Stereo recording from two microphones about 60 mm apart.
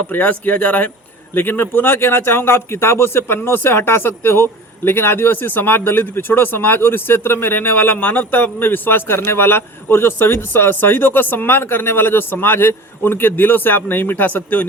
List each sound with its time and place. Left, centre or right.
0.1 s speech: left
1.3 s speech: left